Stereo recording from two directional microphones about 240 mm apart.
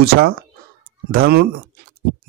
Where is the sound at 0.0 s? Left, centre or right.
Right.